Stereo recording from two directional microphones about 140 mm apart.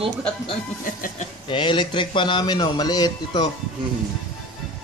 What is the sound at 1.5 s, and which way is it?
A man's voice, 35° left (ahead or behind).